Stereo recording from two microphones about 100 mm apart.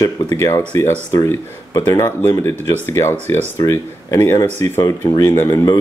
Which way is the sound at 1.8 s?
40° left (ahead or behind).